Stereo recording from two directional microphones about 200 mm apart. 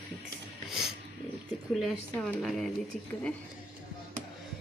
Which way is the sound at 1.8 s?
Centre (ahead or behind).